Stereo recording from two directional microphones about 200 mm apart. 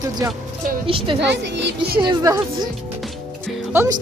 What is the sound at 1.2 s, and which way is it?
Speech, 60° right (ahead or behind).